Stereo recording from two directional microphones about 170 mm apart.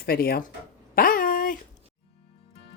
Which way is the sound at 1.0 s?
60° left (ahead or behind).